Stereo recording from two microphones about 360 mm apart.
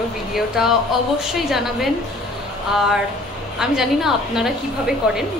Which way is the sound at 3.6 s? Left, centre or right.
Centre.